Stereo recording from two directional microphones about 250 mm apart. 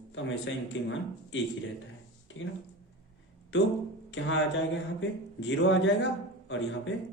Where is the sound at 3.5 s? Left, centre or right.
Left.